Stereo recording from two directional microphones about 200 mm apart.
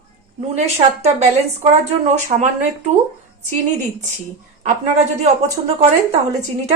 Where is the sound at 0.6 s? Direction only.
35° right (ahead or behind).